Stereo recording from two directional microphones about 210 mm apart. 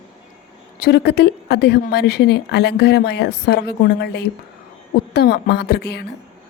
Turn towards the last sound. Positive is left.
turn(degrees=50)  # may be behind; listen again after turning